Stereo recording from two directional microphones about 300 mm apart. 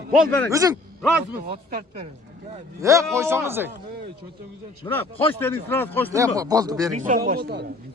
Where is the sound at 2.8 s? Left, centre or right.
Centre.